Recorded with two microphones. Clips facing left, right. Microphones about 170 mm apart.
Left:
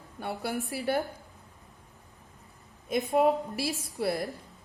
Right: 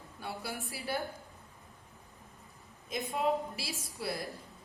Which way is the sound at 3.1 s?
60° left (ahead or behind).